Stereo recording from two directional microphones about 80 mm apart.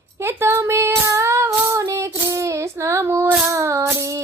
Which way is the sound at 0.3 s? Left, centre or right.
Right.